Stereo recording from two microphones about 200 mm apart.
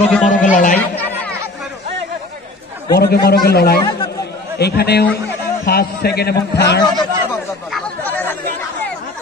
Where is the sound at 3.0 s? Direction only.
50° left (ahead or behind).